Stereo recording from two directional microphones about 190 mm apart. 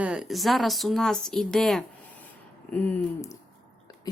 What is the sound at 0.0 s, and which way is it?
Speech, 5° right (ahead or behind).